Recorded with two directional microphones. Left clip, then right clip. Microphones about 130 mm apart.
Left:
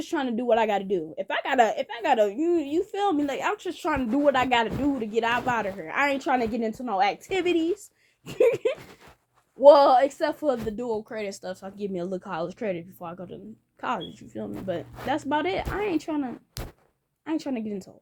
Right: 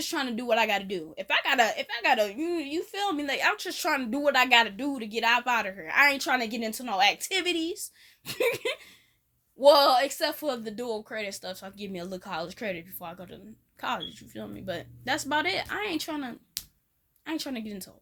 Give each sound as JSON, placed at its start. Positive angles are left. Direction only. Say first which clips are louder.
{"t": 0.0, "sound": "speech", "louder": "left 3 dB", "side_deg": -30}
{"t": 1.8, "sound": "speech", "louder": "left 2 dB", "side_deg": -45}
{"t": 2.3, "sound": "a woman's voice", "louder": "left 6 dB", "side_deg": -20}
{"t": 3.4, "sound": "speech", "louder": "right 1 dB", "side_deg": -40}
{"t": 5.6, "sound": "speech", "louder": "left 4 dB", "side_deg": -30}
{"t": 5.9, "sound": "a woman's voice", "louder": "right 2 dB", "side_deg": -20}
{"t": 11.1, "sound": "a woman's voice", "louder": "left 2 dB", "side_deg": -5}
{"t": 14.3, "sound": "speech", "louder": "left 5 dB", "side_deg": -30}
{"t": 16.6, "sound": "a sound", "louder": "even", "side_deg": 35}
{"t": 17.2, "sound": "a woman's voice", "louder": "left 4 dB", "side_deg": -15}